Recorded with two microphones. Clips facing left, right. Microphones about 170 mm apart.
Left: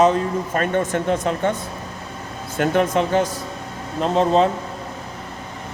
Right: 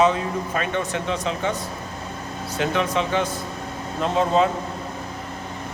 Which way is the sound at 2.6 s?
45° left (ahead or behind).